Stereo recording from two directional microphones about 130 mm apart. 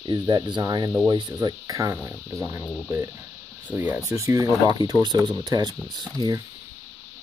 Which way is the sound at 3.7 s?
20° right (ahead or behind).